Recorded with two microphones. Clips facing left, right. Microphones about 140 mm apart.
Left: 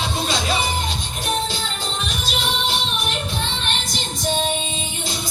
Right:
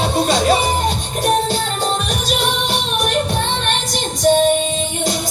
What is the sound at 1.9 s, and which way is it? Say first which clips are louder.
Music: right 7 dB; 55° right (ahead or behind).